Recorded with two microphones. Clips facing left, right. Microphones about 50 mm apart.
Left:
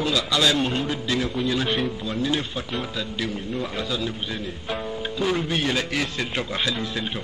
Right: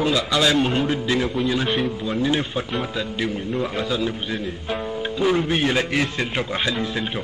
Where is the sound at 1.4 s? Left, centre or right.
Centre.